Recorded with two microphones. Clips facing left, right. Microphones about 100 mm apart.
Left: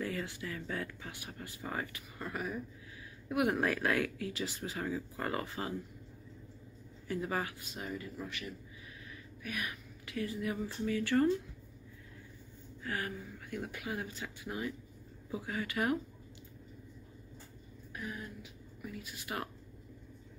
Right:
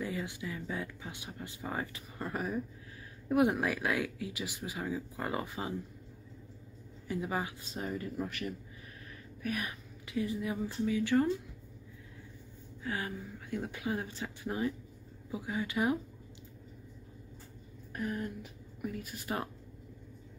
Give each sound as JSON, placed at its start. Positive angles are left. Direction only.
{"t": 0.0, "sound": "speech", "side_deg": -15}
{"t": 3.5, "sound": "speech", "side_deg": -10}
{"t": 7.1, "sound": "speech", "side_deg": -15}
{"t": 7.6, "sound": "speech", "side_deg": -35}
{"t": 9.4, "sound": "speech", "side_deg": -35}
{"t": 10.0, "sound": "speech", "side_deg": -20}
{"t": 12.8, "sound": "speech", "side_deg": -20}
{"t": 15.3, "sound": "speech", "side_deg": -15}
{"t": 17.9, "sound": "speech", "side_deg": -50}